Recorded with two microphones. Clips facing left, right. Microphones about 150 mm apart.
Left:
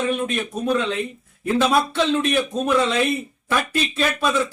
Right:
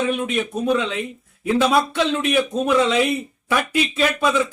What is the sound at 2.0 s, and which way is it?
A man's voice, 10° right (ahead or behind).